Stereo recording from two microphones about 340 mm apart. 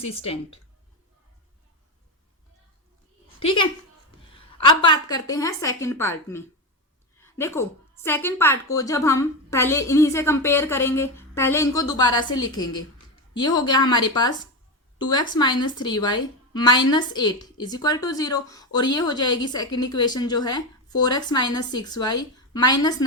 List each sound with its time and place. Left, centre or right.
0.0 s a woman's voice: centre
3.4 s a woman's voice: centre
4.8 s a woman's voice: centre
15.4 s a woman's voice: centre